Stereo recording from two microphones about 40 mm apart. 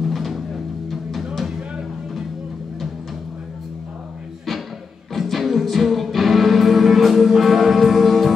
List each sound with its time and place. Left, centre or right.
0.0 s music: centre
5.1 s music: centre